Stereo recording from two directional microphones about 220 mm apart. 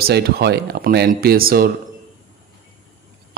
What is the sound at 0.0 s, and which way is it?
Speech, 45° right (ahead or behind).